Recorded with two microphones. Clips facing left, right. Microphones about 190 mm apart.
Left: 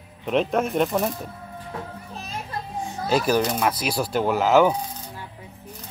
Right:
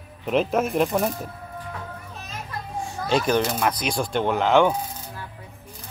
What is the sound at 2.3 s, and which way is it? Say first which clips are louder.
Children playing: left 2 dB; 30° left (ahead or behind).